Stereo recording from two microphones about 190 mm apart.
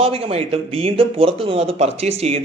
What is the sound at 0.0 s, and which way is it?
Speech, 30° right (ahead or behind).